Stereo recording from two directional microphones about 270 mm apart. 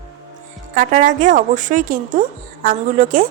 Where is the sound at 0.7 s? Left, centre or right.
Right.